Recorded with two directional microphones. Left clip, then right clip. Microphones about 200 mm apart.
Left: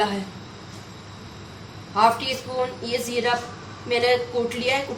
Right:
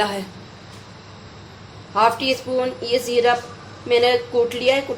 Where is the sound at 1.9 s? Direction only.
50° right (ahead or behind).